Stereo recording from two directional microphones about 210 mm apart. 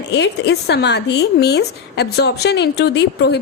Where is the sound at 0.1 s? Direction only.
55° left (ahead or behind).